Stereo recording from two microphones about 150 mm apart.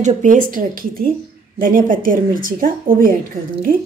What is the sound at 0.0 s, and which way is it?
Speech, 60° right (ahead or behind).